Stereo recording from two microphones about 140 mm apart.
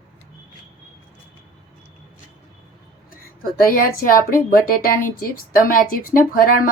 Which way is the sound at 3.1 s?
90° left.